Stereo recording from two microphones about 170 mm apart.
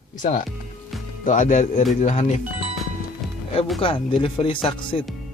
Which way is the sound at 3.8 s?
30° left (ahead or behind).